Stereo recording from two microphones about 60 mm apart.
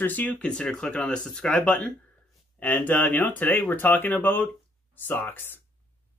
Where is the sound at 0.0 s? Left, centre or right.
Left.